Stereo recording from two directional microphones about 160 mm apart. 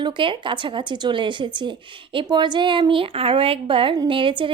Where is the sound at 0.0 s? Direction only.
30° right (ahead or behind).